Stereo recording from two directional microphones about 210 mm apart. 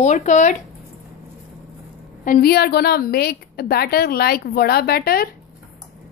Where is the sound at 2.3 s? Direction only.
45° left (ahead or behind).